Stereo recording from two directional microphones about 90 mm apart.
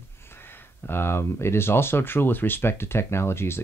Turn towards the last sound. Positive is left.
turn(degrees=30)  # may be behind; listen again after turning